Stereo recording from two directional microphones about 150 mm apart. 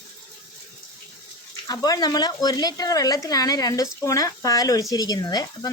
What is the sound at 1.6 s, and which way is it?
Speech, 25° left (ahead or behind).